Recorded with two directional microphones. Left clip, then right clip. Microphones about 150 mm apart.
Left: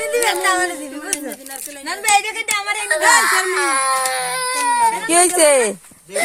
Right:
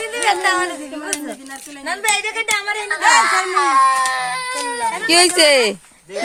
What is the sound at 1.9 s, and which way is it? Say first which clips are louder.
Speech: left 2 dB; 40° right (ahead or behind).